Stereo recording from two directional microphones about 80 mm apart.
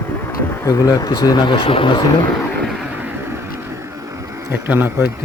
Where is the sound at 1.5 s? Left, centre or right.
Left.